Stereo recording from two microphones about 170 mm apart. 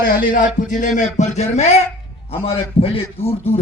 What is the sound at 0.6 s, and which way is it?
A man's voice, 50° left (ahead or behind).